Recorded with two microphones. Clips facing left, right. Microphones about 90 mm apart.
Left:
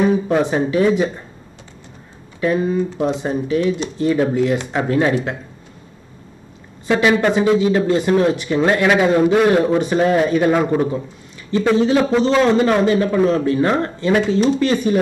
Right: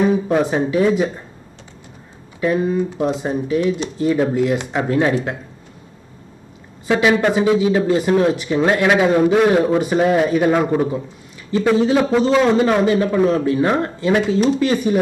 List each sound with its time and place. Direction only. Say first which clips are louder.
0.3 s a man's voice: even; 5° right (ahead or behind)
2.4 s a man's voice: even; centre (ahead or behind)
6.9 s a man's voice: even; 10° right (ahead or behind)